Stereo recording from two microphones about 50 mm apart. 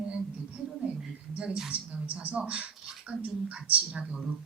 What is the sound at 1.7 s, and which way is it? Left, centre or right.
Speech, right.